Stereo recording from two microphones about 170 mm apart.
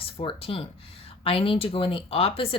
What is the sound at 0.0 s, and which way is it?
Speech, 35° left (ahead or behind).